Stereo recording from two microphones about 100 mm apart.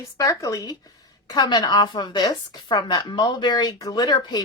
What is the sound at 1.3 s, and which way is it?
A woman's voice, 45° left (ahead or behind).